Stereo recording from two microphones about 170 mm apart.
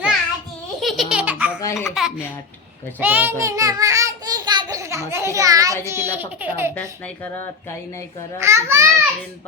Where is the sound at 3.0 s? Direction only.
10° right (ahead or behind).